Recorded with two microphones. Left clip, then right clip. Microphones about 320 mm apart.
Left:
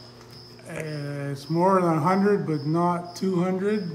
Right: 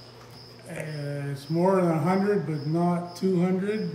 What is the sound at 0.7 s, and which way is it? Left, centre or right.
A man's voice, centre.